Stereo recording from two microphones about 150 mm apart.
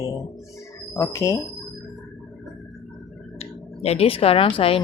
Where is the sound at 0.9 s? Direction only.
20° left (ahead or behind).